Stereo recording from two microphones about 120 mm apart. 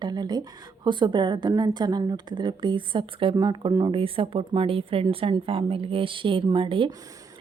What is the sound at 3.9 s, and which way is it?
Speech, 50° right (ahead or behind).